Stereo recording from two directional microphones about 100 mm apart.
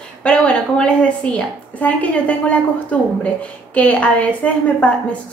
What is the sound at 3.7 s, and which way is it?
A woman's voice, 15° left (ahead or behind).